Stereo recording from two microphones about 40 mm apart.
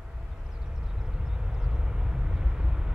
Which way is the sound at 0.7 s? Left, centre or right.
Centre.